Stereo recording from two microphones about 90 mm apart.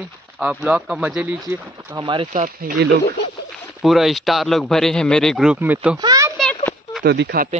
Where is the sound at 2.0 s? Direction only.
65° right (ahead or behind).